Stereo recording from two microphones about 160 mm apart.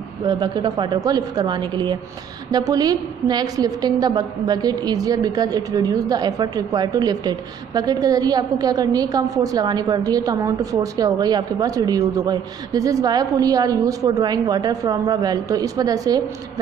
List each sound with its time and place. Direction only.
0.3 s a woman's voice: 25° right (ahead or behind)